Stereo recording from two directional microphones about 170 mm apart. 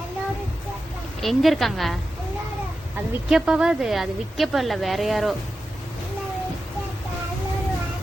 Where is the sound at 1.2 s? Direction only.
Centre (ahead or behind).